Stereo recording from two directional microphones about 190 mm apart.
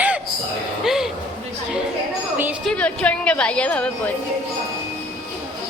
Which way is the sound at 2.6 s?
5° left (ahead or behind).